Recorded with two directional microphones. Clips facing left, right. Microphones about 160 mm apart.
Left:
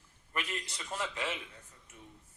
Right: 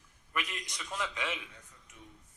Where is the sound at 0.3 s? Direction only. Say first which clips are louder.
Even; 30° left (ahead or behind).